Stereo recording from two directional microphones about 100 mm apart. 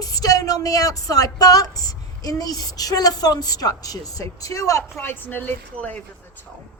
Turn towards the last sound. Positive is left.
turn(degrees=15)  # may be behind; listen again after turning